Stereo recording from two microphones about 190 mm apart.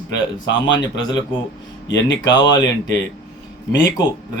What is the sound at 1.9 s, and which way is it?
Speech, 70° left (ahead or behind).